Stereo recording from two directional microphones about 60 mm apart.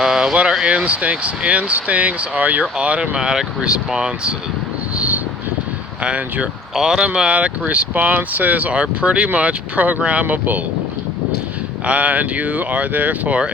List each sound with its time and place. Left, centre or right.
0.0 s a sound: centre
0.6 s speech: centre
4.9 s vehicle: right
6.0 s speech: right
6.7 s speech: centre; by 10.6 s right
11.9 s speech: right